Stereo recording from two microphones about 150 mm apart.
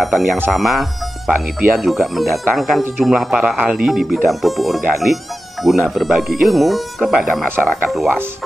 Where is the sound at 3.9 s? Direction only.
Centre (ahead or behind).